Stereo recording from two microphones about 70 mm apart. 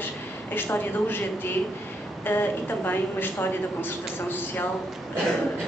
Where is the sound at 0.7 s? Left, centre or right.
Left.